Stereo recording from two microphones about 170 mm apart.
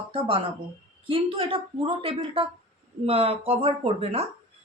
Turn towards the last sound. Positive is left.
turn(degrees=-35)  # may be behind; listen again after turning